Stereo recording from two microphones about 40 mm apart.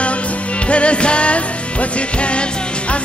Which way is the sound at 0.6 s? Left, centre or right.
Left.